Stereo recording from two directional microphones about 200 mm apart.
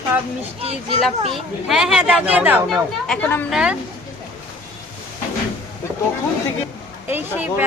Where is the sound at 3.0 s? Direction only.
5° left (ahead or behind).